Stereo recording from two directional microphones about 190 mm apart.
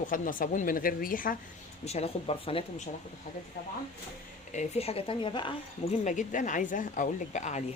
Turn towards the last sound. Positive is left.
turn(degrees=40)  # may be behind; listen again after turning